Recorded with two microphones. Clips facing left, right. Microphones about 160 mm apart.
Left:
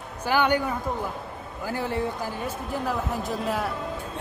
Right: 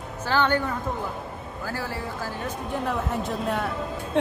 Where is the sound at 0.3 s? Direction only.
10° left (ahead or behind).